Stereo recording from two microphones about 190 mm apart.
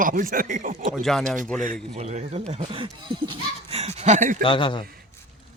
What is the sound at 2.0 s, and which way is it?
Speech, 35° right (ahead or behind).